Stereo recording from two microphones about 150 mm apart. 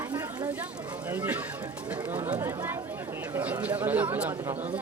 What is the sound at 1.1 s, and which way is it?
Speech, 10° right (ahead or behind).